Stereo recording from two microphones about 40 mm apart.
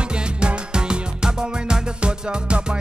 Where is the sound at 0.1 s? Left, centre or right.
Right.